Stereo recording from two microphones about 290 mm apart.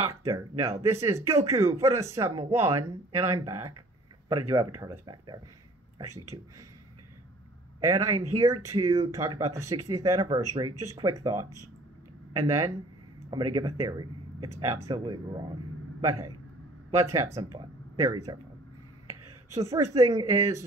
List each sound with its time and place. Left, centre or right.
0.2 s a man's voice: centre
7.8 s a man's voice: centre
8.1 s speech: right
8.7 s a man's voice: centre
12.4 s a man's voice: centre